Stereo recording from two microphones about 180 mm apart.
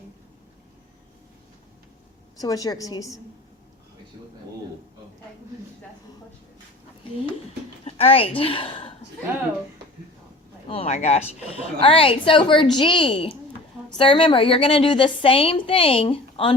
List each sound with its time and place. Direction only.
2.4 s a woman's voice: 20° left (ahead or behind)
7.9 s a woman's voice: 35° left (ahead or behind)
10.7 s a woman's voice: 35° left (ahead or behind)